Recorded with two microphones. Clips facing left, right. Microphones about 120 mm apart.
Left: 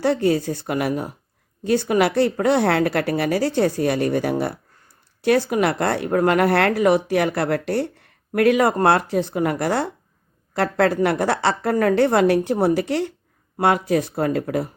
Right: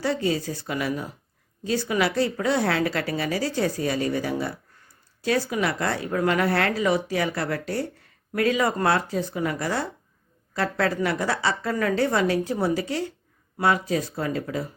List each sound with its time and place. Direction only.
0.0 s speech: 55° left (ahead or behind)